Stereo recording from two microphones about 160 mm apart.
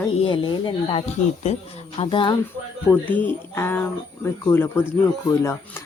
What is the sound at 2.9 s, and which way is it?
Speech, 10° left (ahead or behind).